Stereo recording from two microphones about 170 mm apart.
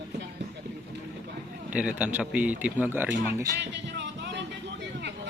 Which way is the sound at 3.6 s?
90° right.